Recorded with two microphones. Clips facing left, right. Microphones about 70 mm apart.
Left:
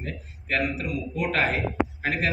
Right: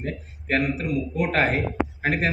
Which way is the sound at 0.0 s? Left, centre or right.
Right.